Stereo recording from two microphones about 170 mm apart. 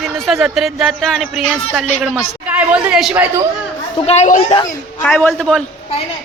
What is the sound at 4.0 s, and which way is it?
Speech, 40° left (ahead or behind).